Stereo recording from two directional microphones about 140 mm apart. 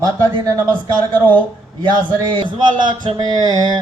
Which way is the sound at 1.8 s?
35° right (ahead or behind).